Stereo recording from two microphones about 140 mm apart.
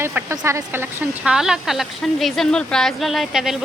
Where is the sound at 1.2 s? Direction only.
5° right (ahead or behind).